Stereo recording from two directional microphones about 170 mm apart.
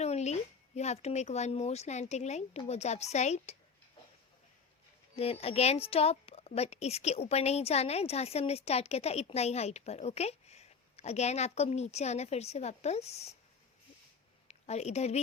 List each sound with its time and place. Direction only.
0.0 s a sound: 40° left (ahead or behind)
0.8 s speech: 40° left (ahead or behind)
5.1 s speech: 35° left (ahead or behind)
14.4 s a woman's voice: 40° left (ahead or behind)